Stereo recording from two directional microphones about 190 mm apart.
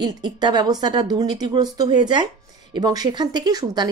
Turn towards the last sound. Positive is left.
turn(degrees=-20)  # may be behind; listen again after turning